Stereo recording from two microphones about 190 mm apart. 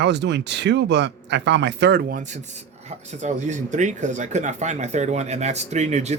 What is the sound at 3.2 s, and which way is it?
Speech, 40° right (ahead or behind).